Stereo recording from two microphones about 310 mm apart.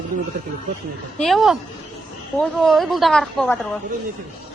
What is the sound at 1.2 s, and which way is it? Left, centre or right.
A woman's voice, centre.